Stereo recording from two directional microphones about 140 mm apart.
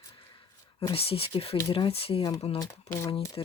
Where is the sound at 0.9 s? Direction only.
45° left (ahead or behind).